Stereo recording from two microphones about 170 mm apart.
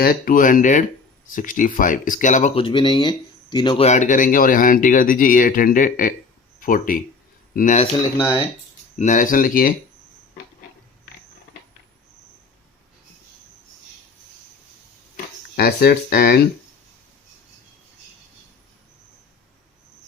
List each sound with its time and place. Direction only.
0.0 s speech: 60° left (ahead or behind)
2.6 s speech: 30° left (ahead or behind)
3.8 s speech: 45° left (ahead or behind)
8.2 s speech: 25° left (ahead or behind)
9.0 s speech: 50° left (ahead or behind)
15.5 s speech: 60° left (ahead or behind)